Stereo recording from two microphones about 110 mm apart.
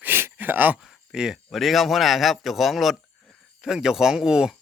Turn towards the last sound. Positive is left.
turn(degrees=-5)  # may be behind; listen again after turning